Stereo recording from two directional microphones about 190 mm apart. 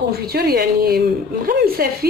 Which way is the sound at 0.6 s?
55° right (ahead or behind).